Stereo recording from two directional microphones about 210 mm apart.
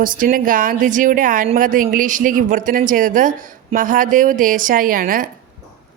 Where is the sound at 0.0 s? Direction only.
40° right (ahead or behind).